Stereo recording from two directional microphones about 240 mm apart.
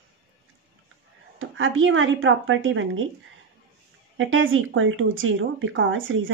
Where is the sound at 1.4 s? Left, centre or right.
Right.